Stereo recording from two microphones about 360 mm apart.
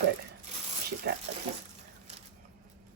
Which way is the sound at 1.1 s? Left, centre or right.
Right.